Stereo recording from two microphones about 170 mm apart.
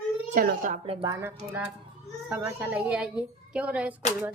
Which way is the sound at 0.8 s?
25° right (ahead or behind).